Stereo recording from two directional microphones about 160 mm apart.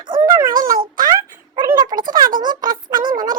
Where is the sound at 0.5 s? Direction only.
60° right (ahead or behind).